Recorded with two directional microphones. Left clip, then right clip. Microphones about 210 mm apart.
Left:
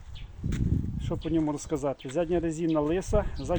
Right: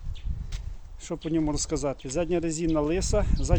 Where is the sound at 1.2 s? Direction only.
5° right (ahead or behind).